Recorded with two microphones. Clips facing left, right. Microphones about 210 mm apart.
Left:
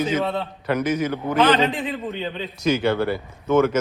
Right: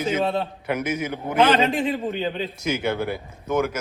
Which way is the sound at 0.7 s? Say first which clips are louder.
Left 4 dB; 10° right (ahead or behind).